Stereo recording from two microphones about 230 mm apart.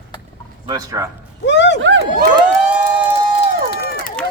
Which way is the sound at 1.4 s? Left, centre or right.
Left.